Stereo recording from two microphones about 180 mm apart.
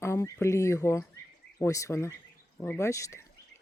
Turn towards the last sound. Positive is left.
turn(degrees=15)  # may be behind; listen again after turning